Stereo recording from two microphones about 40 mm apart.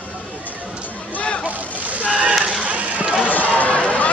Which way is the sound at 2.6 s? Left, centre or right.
Right.